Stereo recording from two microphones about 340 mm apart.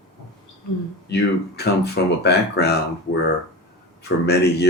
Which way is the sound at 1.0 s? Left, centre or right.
Left.